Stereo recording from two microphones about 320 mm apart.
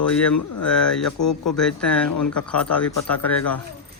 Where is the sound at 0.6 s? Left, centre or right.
Centre.